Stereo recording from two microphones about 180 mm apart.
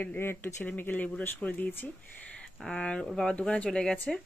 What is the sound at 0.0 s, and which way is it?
Speech, 10° left (ahead or behind).